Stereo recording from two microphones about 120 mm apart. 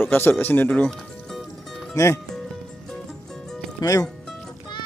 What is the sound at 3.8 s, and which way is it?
Speech, 30° left (ahead or behind).